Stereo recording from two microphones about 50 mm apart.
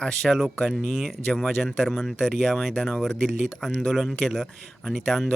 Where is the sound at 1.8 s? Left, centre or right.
Centre.